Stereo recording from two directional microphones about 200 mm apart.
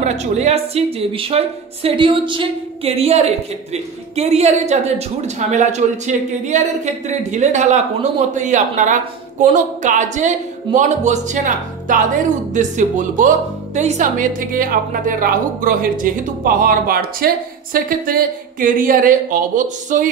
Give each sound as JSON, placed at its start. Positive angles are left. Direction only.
{"t": 0.0, "sound": "a woman's voice", "side_deg": -35}